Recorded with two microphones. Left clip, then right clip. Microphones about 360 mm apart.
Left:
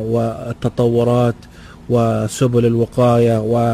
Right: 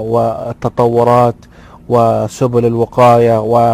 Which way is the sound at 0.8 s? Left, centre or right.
Right.